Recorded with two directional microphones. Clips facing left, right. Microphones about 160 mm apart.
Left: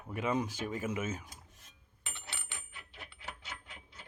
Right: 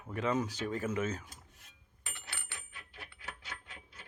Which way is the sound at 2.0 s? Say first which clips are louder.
Left 1 dB; 20° left (ahead or behind).